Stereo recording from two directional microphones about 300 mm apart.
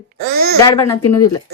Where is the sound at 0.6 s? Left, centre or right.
Centre.